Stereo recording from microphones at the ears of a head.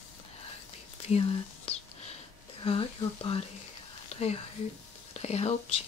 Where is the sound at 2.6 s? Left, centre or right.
Left.